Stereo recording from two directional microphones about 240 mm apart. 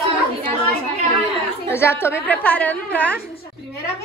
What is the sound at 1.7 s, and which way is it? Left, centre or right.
A woman's voice, centre.